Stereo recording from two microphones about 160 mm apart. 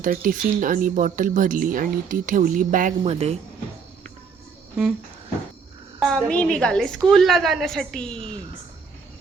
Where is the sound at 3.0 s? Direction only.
40° right (ahead or behind).